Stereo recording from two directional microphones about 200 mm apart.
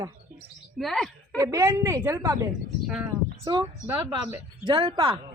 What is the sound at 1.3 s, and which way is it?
A woman's voice, 15° right (ahead or behind).